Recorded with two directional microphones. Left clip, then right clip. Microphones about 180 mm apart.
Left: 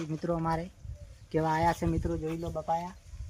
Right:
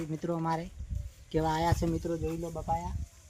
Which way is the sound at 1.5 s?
25° left (ahead or behind).